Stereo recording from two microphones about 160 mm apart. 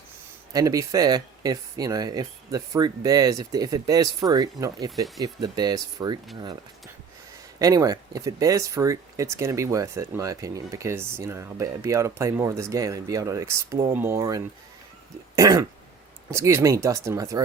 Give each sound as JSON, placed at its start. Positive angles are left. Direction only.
{"t": 0.5, "sound": "speech", "side_deg": -20}
{"t": 7.6, "sound": "speech", "side_deg": -20}